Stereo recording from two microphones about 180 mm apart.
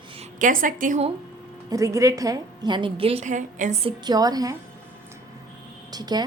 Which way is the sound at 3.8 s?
25° right (ahead or behind).